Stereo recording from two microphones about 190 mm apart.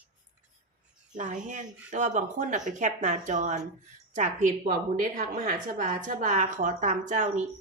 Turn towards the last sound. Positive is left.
turn(degrees=-40)  # may be behind; listen again after turning